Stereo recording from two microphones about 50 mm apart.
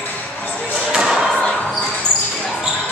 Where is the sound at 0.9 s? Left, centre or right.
Centre.